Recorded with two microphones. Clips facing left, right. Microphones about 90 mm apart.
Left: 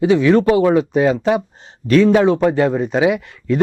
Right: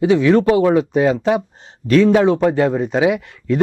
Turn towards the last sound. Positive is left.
turn(degrees=15)  # may be behind; listen again after turning